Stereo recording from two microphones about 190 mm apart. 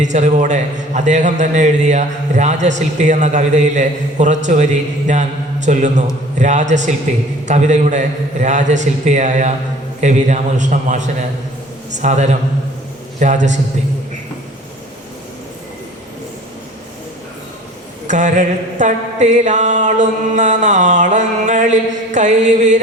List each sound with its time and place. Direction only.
0.0 s a man's voice: 40° right (ahead or behind)
18.1 s a man's voice: 40° right (ahead or behind)